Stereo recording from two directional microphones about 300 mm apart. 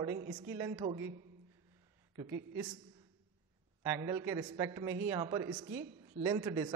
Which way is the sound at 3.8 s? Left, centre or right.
Centre.